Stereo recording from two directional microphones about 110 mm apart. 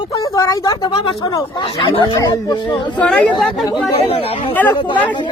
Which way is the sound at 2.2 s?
40° left (ahead or behind).